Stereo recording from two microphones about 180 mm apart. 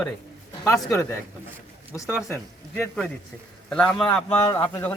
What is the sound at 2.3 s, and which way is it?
A man's voice, 10° left (ahead or behind).